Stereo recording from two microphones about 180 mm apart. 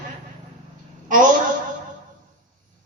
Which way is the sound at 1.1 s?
45° right (ahead or behind).